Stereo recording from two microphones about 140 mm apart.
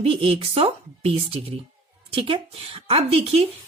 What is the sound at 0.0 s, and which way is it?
Speech, 40° right (ahead or behind).